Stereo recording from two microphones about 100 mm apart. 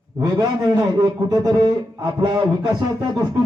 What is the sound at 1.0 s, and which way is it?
A man's voice, 45° right (ahead or behind).